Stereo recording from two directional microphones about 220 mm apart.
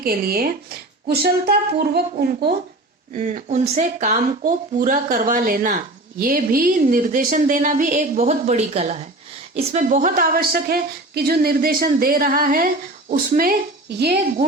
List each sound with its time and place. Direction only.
0.0 s speech: 40° right (ahead or behind)
3.1 s speech: 35° right (ahead or behind)